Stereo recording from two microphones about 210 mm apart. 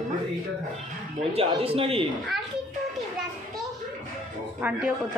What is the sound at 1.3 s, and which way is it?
Speech, 25° right (ahead or behind).